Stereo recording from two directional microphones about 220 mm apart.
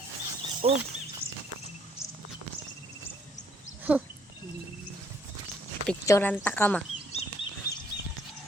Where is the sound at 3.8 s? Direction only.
5° right (ahead or behind).